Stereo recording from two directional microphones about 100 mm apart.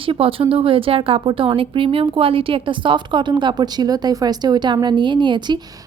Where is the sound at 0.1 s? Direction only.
65° right (ahead or behind); by 5.5 s 50° right (ahead or behind).